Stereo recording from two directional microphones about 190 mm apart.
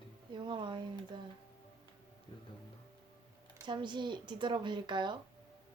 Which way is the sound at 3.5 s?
25° right (ahead or behind).